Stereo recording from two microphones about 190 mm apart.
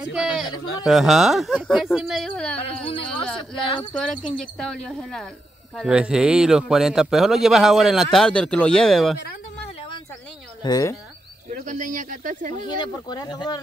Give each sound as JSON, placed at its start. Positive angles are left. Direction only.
{"t": 0.1, "sound": "a man's voice", "side_deg": 0}
{"t": 3.9, "sound": "a man's voice", "side_deg": 5}
{"t": 10.6, "sound": "speech", "side_deg": 20}
{"t": 11.5, "sound": "speech", "side_deg": -40}
{"t": 12.6, "sound": "speech", "side_deg": 25}